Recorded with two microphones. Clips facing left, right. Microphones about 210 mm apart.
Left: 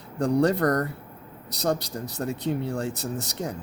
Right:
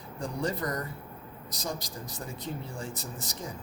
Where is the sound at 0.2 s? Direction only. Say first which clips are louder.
Left 11 dB; 70° left (ahead or behind).